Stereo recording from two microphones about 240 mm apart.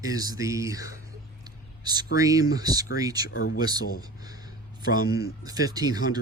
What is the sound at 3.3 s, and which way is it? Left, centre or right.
Speech, left.